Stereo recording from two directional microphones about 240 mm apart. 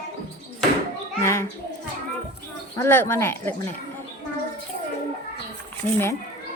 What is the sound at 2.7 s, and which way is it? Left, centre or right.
Speech, centre.